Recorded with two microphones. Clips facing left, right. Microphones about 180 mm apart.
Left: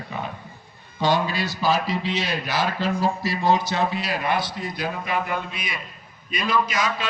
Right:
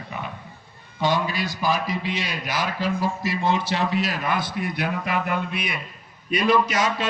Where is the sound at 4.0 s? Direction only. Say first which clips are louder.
Even; 45° right (ahead or behind); by 5.1 s 65° right (ahead or behind).